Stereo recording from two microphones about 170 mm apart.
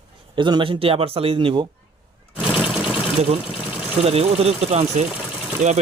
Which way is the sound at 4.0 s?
35° right (ahead or behind).